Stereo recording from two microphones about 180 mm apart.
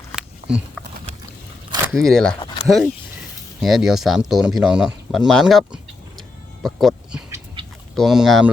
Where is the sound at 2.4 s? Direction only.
25° left (ahead or behind).